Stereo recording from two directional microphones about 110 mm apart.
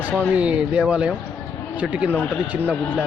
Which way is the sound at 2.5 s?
15° right (ahead or behind).